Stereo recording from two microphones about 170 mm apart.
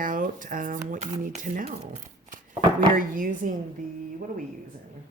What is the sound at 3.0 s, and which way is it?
Speech, 50° right (ahead or behind).